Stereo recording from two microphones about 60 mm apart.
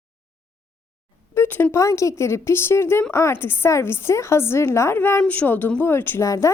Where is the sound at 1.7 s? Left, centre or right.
Left.